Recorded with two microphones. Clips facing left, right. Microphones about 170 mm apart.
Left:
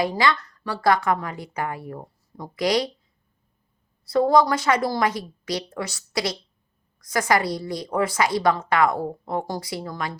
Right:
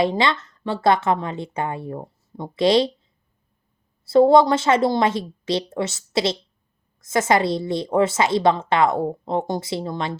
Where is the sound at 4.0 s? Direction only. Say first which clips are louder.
Right 5 dB; 25° right (ahead or behind).